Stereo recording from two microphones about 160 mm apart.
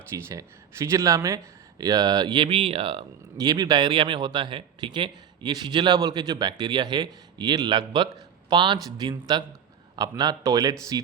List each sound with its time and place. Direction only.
0.1 s a man's voice: 15° right (ahead or behind); by 3.0 s 35° right (ahead or behind)
3.3 s a man's voice: 25° right (ahead or behind)